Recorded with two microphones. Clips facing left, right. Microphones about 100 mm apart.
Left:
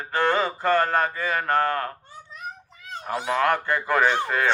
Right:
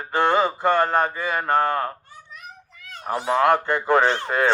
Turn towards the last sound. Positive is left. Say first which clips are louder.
# right 1 dB
turn(degrees=-25)  # may be behind; listen again after turning